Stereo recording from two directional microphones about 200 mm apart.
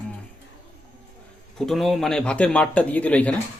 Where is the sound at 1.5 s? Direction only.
Centre (ahead or behind).